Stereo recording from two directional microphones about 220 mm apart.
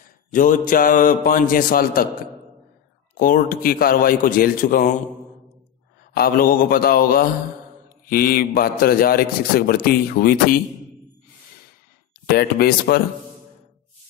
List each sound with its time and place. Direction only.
0.3 s a man's voice: 40° left (ahead or behind)
3.2 s a man's voice: 40° left (ahead or behind)
6.1 s a man's voice: 40° left (ahead or behind)
12.3 s a man's voice: 45° left (ahead or behind)